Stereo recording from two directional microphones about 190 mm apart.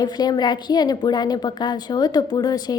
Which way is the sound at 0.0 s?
20° left (ahead or behind).